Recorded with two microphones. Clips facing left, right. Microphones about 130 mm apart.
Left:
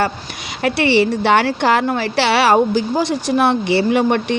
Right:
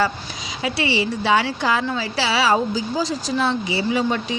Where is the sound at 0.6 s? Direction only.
60° left (ahead or behind).